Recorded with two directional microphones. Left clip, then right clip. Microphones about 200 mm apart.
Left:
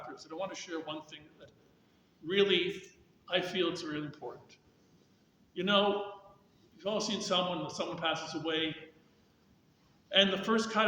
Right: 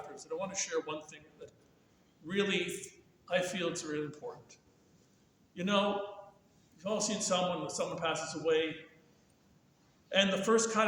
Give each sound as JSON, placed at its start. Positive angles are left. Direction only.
{"t": 0.2, "sound": "a man's voice", "side_deg": -10}
{"t": 10.1, "sound": "a man's voice", "side_deg": -10}